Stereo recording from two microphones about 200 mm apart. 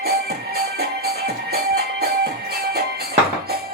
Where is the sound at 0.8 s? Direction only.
55° right (ahead or behind).